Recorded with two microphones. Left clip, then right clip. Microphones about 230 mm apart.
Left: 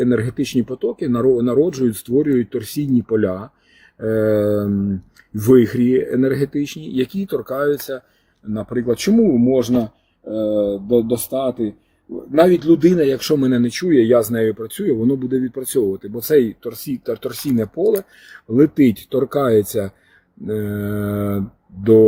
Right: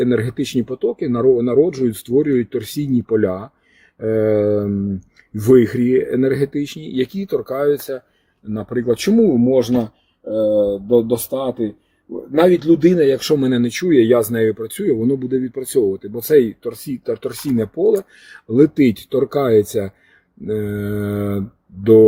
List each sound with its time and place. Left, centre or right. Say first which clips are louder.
0.0 s speech: right 1 dB; centre